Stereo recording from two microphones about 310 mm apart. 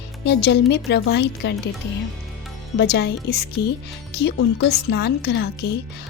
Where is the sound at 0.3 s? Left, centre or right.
Left.